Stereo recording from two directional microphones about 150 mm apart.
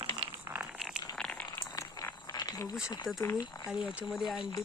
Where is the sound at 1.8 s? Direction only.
25° left (ahead or behind).